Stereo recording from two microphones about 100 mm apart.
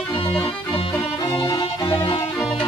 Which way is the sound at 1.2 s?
40° left (ahead or behind).